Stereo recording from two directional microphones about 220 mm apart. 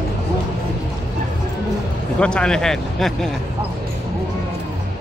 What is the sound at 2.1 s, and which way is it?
Speech, 5° left (ahead or behind).